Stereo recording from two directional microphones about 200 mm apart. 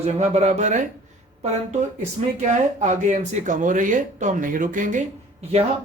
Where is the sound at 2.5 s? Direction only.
40° right (ahead or behind).